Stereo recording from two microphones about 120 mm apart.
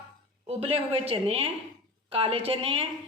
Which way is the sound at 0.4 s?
55° right (ahead or behind).